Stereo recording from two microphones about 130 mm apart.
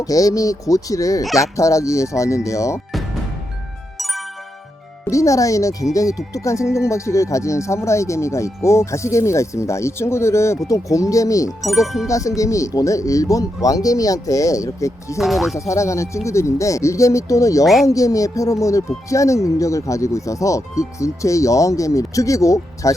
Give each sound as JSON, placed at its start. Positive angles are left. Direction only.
{"t": 0.0, "sound": "speech", "side_deg": 25}
{"t": 3.9, "sound": "music", "side_deg": 0}
{"t": 5.0, "sound": "speech", "side_deg": 25}
{"t": 11.6, "sound": "speech", "side_deg": 0}
{"t": 12.0, "sound": "speech", "side_deg": 25}
{"t": 15.2, "sound": "speech", "side_deg": 0}
{"t": 15.5, "sound": "speech", "side_deg": 25}